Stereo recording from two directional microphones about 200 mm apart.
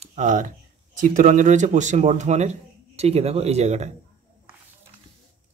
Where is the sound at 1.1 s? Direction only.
40° right (ahead or behind).